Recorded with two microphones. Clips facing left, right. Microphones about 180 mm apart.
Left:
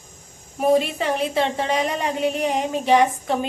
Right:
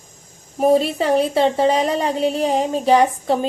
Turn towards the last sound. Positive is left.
turn(degrees=-35)  # may be behind; listen again after turning